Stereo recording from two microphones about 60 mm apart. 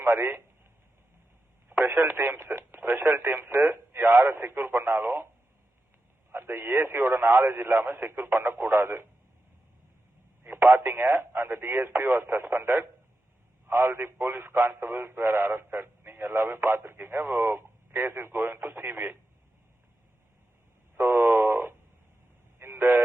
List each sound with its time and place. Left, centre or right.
0.0 s speech: right
1.7 s speech: right
6.3 s a man's voice: right
10.6 s speech: right
11.1 s speech: right
20.9 s radio: right
22.5 s vehicle: right